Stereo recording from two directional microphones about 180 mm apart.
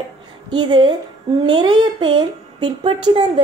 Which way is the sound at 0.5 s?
25° right (ahead or behind).